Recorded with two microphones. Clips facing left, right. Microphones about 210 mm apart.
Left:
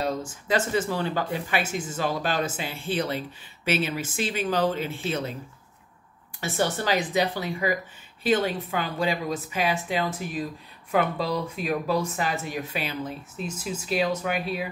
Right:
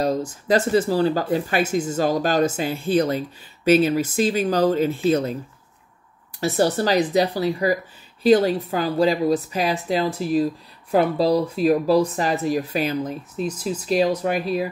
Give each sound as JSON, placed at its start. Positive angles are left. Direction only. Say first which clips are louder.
{"t": 0.0, "sound": "speech", "louder": "right 6 dB", "side_deg": -40}
{"t": 6.4, "sound": "speech", "louder": "right 7 dB", "side_deg": -35}